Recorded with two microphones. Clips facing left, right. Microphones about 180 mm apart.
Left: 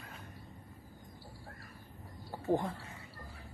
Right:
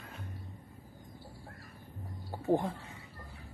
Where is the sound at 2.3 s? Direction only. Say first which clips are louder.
Right 2 dB; 15° right (ahead or behind).